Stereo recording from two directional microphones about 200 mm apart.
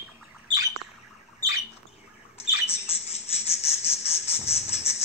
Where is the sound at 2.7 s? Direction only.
30° left (ahead or behind).